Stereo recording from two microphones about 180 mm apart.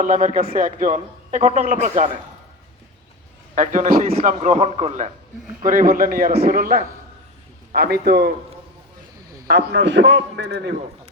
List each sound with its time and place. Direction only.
0.0 s a man's voice: 45° right (ahead or behind)
3.5 s a man's voice: 45° right (ahead or behind)
5.6 s a man's voice: 50° right (ahead or behind); by 8.3 s 65° right (ahead or behind)
9.5 s a man's voice: 70° right (ahead or behind)